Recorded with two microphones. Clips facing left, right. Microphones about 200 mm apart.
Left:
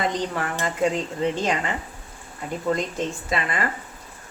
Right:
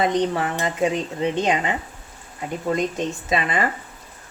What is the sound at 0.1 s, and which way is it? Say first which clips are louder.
Speech: right 5 dB; 20° right (ahead or behind).